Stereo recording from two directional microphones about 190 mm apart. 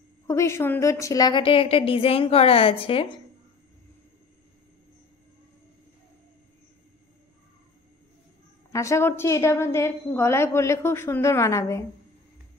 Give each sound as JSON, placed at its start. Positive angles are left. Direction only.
{"t": 0.3, "sound": "a woman's voice", "side_deg": 15}
{"t": 8.7, "sound": "a woman's voice", "side_deg": 15}